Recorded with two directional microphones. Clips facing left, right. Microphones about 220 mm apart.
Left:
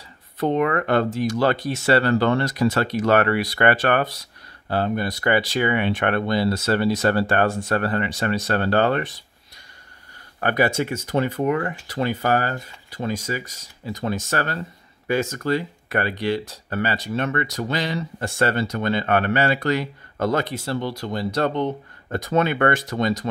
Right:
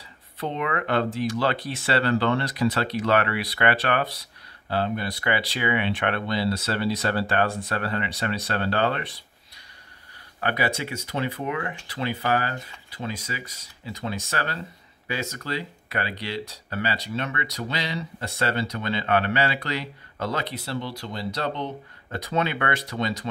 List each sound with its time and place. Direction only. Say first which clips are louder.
0.4 s speech: left 7 dB; 45° left (ahead or behind)
10.4 s speech: left 6 dB; 45° left (ahead or behind)